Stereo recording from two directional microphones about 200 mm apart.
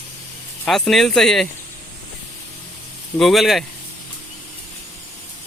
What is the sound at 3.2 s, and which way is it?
Speech, centre (ahead or behind).